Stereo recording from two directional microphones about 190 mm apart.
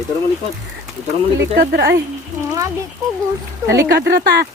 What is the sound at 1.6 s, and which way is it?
Speech, 55° right (ahead or behind).